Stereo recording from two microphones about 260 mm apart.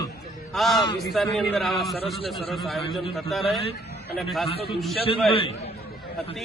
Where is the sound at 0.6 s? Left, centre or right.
Centre.